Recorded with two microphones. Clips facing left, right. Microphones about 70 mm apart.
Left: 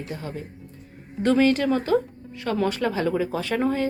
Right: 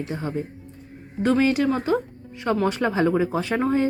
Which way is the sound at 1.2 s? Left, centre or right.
Centre.